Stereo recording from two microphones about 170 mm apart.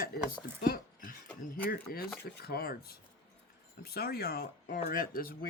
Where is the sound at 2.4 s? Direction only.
65° left (ahead or behind).